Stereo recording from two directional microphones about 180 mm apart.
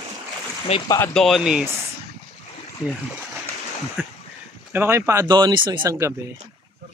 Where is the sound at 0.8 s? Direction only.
15° left (ahead or behind).